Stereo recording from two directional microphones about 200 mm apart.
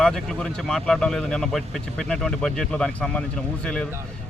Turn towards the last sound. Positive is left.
turn(degrees=5)  # may be behind; listen again after turning